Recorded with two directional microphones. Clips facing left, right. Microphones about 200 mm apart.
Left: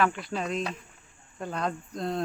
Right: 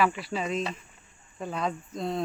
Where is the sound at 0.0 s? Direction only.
5° right (ahead or behind).